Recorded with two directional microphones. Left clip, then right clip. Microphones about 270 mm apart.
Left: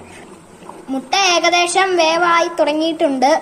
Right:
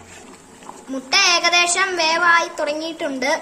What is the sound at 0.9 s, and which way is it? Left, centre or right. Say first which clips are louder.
A child's voice: left 1 dB; centre.